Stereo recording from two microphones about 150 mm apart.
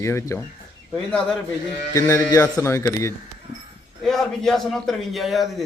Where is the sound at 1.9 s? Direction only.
20° left (ahead or behind).